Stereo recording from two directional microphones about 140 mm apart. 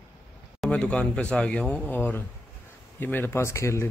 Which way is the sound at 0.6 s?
5° left (ahead or behind).